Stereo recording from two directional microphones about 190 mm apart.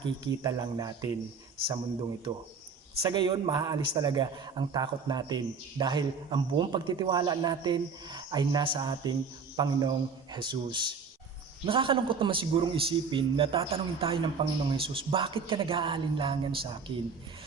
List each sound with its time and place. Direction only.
0.0 s a man's voice: 20° right (ahead or behind)